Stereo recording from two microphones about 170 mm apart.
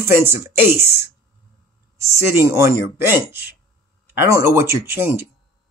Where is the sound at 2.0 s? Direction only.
15° right (ahead or behind).